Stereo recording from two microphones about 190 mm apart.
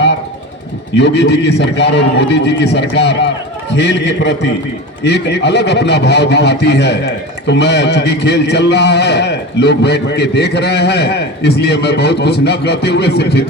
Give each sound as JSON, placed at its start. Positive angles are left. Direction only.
{"t": 0.9, "sound": "a man's voice", "side_deg": 65}